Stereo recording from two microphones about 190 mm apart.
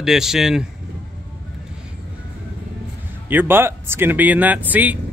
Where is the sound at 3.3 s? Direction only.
10° right (ahead or behind).